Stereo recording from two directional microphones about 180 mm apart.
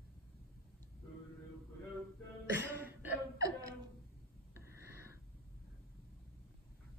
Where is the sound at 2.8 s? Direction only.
15° right (ahead or behind).